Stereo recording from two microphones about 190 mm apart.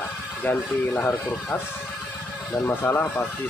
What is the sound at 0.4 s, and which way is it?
Speech, 10° left (ahead or behind).